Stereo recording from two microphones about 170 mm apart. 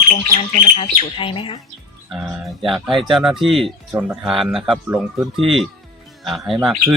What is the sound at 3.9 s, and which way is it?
Speech, 10° right (ahead or behind).